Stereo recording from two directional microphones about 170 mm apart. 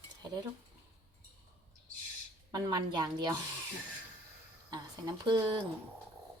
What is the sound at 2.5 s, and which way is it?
Speech, 25° right (ahead or behind).